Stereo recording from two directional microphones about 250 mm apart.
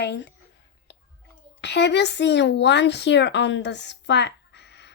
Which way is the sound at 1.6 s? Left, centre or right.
Left.